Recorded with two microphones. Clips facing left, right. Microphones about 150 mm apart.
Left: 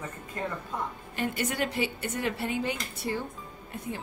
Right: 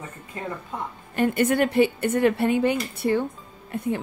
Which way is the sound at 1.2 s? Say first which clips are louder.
Right 9 dB; 55° right (ahead or behind).